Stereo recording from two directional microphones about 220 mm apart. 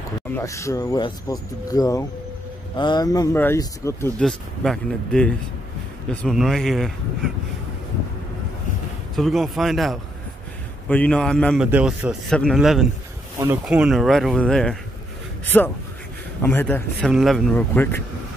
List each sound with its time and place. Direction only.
0.4 s speech: 15° left (ahead or behind)
4.2 s a man's voice: centre (ahead or behind)
9.1 s a man's voice: centre (ahead or behind)